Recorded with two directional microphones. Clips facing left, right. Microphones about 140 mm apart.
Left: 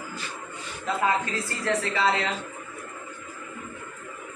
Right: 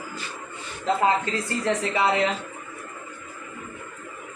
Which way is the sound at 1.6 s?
15° right (ahead or behind).